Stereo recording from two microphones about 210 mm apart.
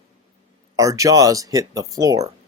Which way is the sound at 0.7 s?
15° right (ahead or behind).